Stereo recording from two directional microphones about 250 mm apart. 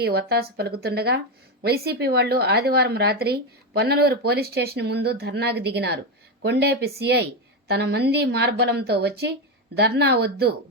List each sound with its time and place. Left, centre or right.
0.0 s a woman's voice: right